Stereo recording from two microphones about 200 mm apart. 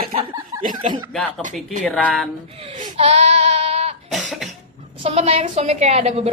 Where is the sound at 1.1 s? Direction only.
Centre (ahead or behind).